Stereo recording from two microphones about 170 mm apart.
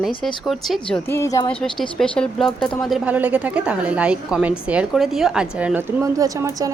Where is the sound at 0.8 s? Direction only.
10° left (ahead or behind).